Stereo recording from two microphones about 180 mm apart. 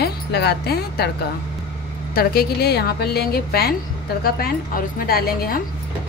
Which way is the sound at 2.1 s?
60° left (ahead or behind).